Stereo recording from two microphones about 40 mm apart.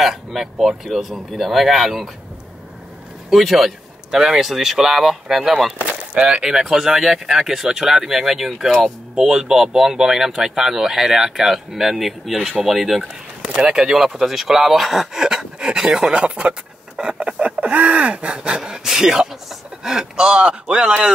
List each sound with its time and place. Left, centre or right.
0.0 s speech: centre
3.3 s speech: centre
4.1 s speech: centre
6.1 s speech: right
6.4 s speech: centre
13.6 s speech: centre
13.9 s speech: centre; by 18.6 s right
18.6 s speech: centre